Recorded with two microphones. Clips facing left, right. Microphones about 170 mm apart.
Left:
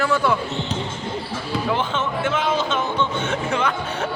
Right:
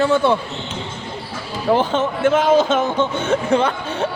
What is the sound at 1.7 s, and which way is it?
Speech, 40° right (ahead or behind).